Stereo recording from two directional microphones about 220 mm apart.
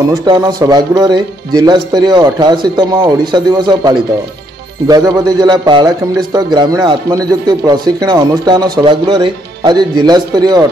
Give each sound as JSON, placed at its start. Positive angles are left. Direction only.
{"t": 0.2, "sound": "a man's voice", "side_deg": -20}